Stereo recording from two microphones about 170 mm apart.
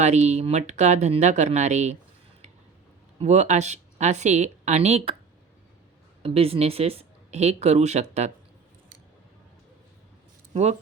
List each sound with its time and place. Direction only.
0.0 s speech: 40° right (ahead or behind)
3.2 s speech: 40° right (ahead or behind)
6.2 s speech: 35° right (ahead or behind)
10.5 s speech: 40° right (ahead or behind)